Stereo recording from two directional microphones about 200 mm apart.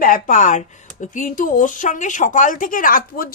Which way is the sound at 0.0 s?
40° left (ahead or behind).